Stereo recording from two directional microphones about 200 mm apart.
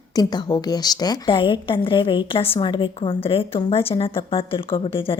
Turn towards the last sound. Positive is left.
turn(degrees=25)  # may be behind; listen again after turning